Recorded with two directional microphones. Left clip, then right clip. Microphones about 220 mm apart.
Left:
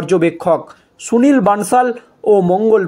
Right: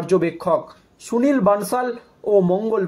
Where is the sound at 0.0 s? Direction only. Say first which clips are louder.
Left 5 dB; 40° left (ahead or behind).